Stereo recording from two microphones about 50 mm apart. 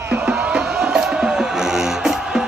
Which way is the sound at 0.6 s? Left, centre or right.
Centre.